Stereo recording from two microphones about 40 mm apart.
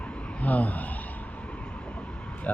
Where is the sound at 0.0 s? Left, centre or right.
Left.